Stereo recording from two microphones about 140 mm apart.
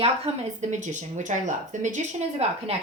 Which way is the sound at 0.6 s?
60° right (ahead or behind).